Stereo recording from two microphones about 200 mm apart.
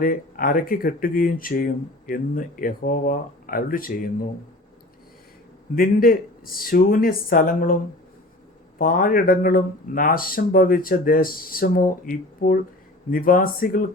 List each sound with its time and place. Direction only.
0.0 s speech: 45° left (ahead or behind)
5.7 s speech: 45° left (ahead or behind)
8.8 s speech: 45° left (ahead or behind)